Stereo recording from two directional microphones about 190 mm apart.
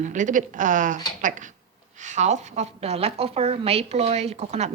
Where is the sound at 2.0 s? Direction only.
40° right (ahead or behind).